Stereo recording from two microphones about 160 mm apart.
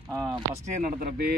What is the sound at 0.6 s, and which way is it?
Speech, 55° right (ahead or behind).